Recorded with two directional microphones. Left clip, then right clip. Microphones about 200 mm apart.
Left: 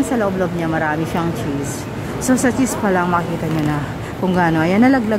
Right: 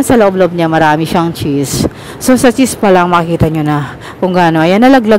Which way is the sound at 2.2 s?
40° right (ahead or behind).